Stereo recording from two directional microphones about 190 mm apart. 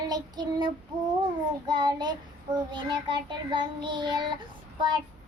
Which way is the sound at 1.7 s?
20° right (ahead or behind).